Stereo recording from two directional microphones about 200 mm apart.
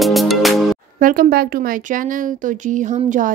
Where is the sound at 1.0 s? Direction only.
45° right (ahead or behind).